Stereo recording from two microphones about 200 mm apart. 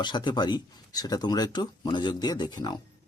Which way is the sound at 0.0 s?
20° left (ahead or behind).